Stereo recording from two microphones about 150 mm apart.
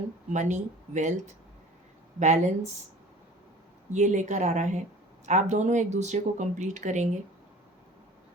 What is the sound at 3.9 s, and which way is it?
Speech, 55° right (ahead or behind).